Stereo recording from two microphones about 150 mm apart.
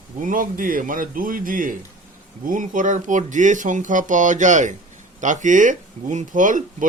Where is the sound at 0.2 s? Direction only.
60° right (ahead or behind).